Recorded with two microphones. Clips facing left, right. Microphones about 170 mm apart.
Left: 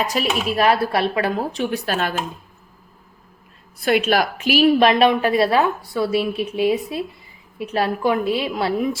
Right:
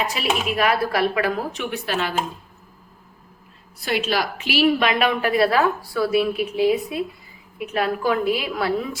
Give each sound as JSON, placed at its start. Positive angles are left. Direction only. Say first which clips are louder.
{"t": 0.1, "sound": "speech", "louder": "left 2 dB", "side_deg": 40}
{"t": 3.8, "sound": "a woman's voice", "louder": "left 5 dB", "side_deg": 55}
{"t": 5.0, "sound": "a woman's voice", "louder": "left 3 dB", "side_deg": 25}